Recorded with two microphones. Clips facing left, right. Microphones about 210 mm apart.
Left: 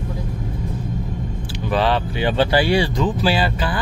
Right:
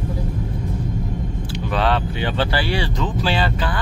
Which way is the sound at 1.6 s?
5° left (ahead or behind).